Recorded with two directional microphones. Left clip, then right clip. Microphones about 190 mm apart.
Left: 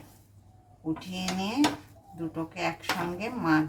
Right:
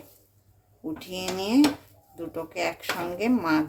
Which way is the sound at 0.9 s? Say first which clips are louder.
Right 3 dB; 65° right (ahead or behind).